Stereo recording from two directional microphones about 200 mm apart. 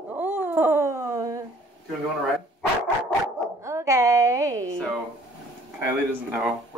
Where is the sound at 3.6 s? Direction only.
15° right (ahead or behind).